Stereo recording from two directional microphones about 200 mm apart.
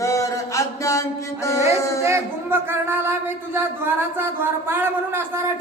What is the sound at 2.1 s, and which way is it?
A woman's voice, 10° right (ahead or behind).